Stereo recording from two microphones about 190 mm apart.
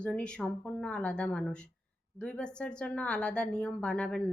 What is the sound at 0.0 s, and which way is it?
A woman's voice, 5° left (ahead or behind).